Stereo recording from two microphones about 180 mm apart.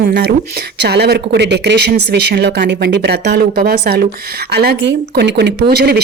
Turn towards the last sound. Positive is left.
turn(degrees=-60)  # may be behind; listen again after turning